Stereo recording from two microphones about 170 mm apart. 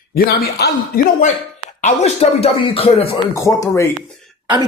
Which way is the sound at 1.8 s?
40° left (ahead or behind).